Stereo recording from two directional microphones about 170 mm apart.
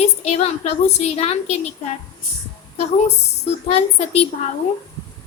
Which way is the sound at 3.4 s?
40° left (ahead or behind).